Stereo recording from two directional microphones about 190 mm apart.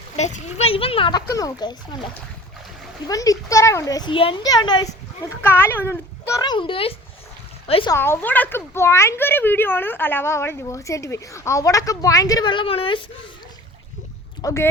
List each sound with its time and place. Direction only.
0.2 s a child's voice: 35° left (ahead or behind)
3.1 s a child's voice: 20° left (ahead or behind)
7.9 s speech: 10° left (ahead or behind); by 13.1 s 30° left (ahead or behind)
14.4 s speech: 15° left (ahead or behind)